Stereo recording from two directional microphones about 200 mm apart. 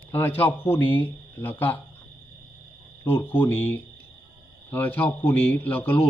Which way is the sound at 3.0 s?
10° left (ahead or behind).